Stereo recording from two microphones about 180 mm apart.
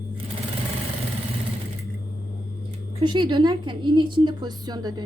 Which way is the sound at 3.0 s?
25° right (ahead or behind).